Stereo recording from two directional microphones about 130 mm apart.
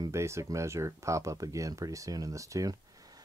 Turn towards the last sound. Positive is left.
turn(degrees=-30)  # may be behind; listen again after turning